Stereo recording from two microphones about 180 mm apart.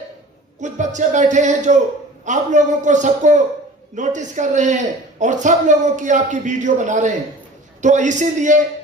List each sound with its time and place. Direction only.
0.6 s speech: 40° right (ahead or behind)